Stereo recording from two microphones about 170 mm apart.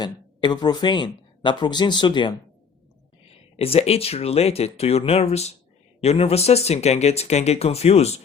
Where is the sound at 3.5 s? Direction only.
35° left (ahead or behind).